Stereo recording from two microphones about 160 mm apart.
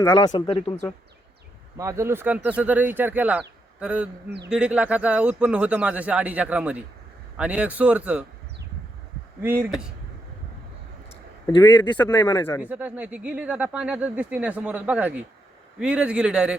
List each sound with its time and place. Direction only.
0.1 s speech: 25° left (ahead or behind)
1.7 s speech: 20° right (ahead or behind)
9.4 s speech: 15° right (ahead or behind)
9.6 s speech: 5° right (ahead or behind)
11.4 s speech: 25° left (ahead or behind)
12.6 s speech: 10° right (ahead or behind)